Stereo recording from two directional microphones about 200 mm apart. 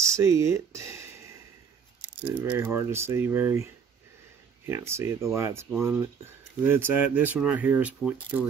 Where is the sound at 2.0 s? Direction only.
5° right (ahead or behind).